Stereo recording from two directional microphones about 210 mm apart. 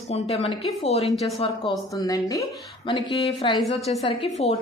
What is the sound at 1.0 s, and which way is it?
Speech, centre (ahead or behind).